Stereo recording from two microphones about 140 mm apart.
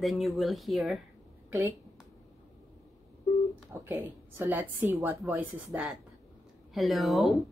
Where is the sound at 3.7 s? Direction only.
15° right (ahead or behind).